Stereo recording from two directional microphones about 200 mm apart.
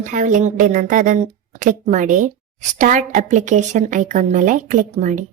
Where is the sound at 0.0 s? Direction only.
40° right (ahead or behind).